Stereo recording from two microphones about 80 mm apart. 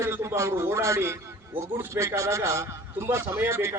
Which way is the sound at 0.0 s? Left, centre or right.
Right.